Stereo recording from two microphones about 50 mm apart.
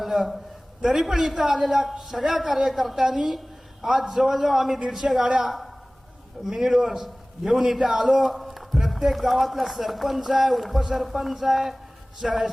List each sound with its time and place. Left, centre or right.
0.0 s a man's voice: centre
5.2 s a man's voice: centre